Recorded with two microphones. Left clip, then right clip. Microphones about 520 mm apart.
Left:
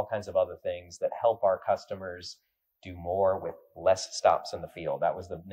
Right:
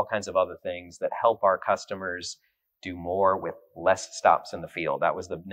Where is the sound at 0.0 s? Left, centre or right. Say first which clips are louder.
Right 3 dB; left.